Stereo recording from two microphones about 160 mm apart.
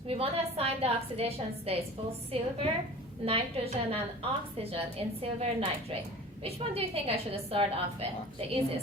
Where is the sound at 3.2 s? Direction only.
40° right (ahead or behind).